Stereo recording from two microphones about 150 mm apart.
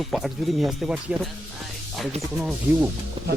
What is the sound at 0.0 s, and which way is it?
Speech, centre (ahead or behind).